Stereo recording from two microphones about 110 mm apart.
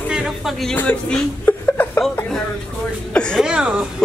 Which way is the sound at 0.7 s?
15° left (ahead or behind).